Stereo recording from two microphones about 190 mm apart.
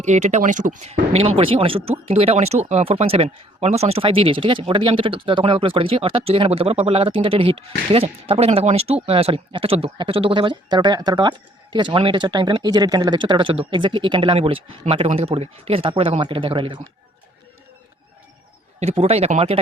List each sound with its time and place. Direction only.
0.0 s speech: 40° right (ahead or behind)
18.8 s speech: 35° right (ahead or behind)